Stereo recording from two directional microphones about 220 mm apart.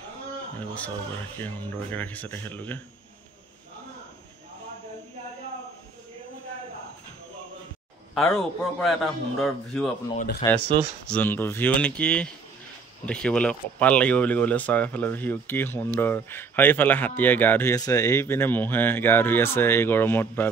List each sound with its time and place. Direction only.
0.6 s speech: 5° left (ahead or behind)
8.1 s a man's voice: centre (ahead or behind)
10.1 s speech: 45° left (ahead or behind)
11.1 s a man's voice: 10° left (ahead or behind)